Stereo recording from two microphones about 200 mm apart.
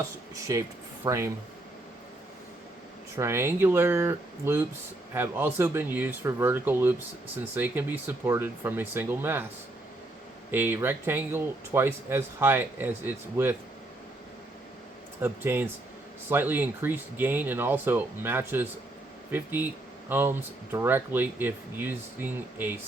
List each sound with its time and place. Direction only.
0.3 s speech: 15° right (ahead or behind)
3.2 s speech: 15° right (ahead or behind)
10.5 s speech: 10° right (ahead or behind)
15.2 s speech: 10° right (ahead or behind)